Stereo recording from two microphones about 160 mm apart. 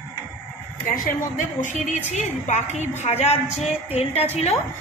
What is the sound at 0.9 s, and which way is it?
A woman's voice, 55° left (ahead or behind).